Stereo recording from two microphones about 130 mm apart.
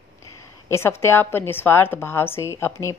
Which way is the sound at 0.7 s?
20° left (ahead or behind).